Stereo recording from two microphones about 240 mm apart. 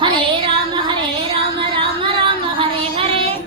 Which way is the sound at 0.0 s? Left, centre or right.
Centre.